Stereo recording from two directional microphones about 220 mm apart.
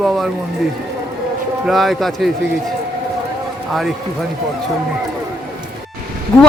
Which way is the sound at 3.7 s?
Centre (ahead or behind).